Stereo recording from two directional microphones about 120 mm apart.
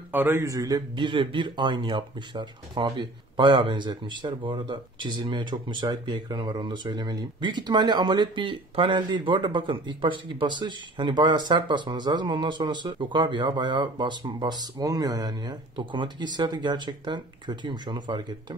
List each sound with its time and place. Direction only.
0.1 s a man's voice: 20° right (ahead or behind); by 18.6 s 40° right (ahead or behind)